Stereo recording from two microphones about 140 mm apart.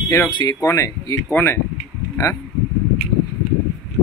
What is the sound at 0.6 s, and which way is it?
Speech, 20° left (ahead or behind).